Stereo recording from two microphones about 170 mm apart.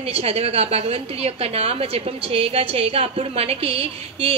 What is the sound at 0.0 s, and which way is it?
A woman's voice, 35° right (ahead or behind).